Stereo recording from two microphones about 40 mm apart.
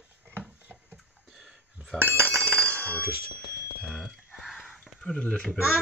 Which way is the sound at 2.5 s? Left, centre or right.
Left.